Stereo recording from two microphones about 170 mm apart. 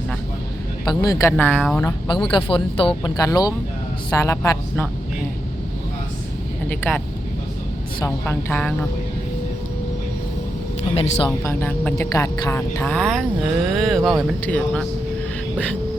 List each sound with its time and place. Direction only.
0.9 s speech: 20° left (ahead or behind)
1.3 s a woman's voice: 10° left (ahead or behind)
2.3 s speech: 30° left (ahead or behind)
6.7 s a woman's voice: 10° left (ahead or behind)
8.0 s a woman's voice: 15° left (ahead or behind)
10.9 s speech: 40° left (ahead or behind)
11.9 s a woman's voice: 20° left (ahead or behind)